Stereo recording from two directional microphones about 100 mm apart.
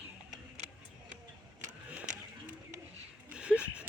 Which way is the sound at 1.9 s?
15° right (ahead or behind).